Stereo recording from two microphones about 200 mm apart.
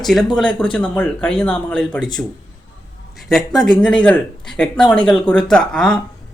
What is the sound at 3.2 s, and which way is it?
Speech, centre (ahead or behind).